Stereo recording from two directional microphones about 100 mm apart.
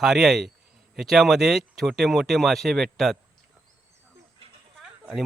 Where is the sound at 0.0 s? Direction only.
5° right (ahead or behind).